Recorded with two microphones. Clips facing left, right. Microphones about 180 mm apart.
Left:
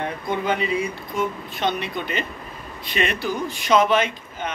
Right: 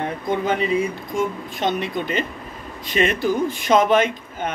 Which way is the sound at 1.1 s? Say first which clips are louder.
Right 1 dB; 45° right (ahead or behind).